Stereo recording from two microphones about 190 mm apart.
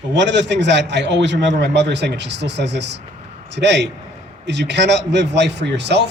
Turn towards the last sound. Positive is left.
turn(degrees=-65)  # may be behind; listen again after turning